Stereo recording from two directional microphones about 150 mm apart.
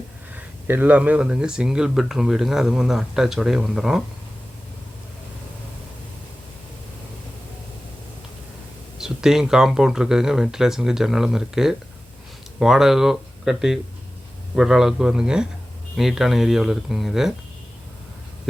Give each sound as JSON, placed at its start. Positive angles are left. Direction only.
{"t": 0.7, "sound": "speech", "side_deg": -10}
{"t": 9.0, "sound": "speech", "side_deg": -5}